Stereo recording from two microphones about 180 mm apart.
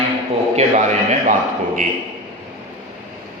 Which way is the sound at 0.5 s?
40° right (ahead or behind).